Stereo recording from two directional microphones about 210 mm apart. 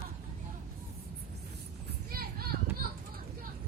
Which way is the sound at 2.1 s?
45° right (ahead or behind).